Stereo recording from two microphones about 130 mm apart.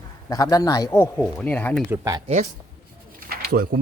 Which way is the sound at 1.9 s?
25° right (ahead or behind).